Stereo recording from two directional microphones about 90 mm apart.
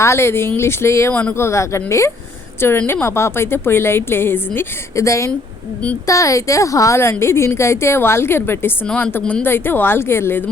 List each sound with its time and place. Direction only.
0.0 s a woman's voice: 30° left (ahead or behind)
1.1 s a woman's voice: 15° left (ahead or behind)
1.4 s a woman's voice: 30° left (ahead or behind)
8.9 s a woman's voice: 10° left (ahead or behind); by 10.4 s 25° left (ahead or behind)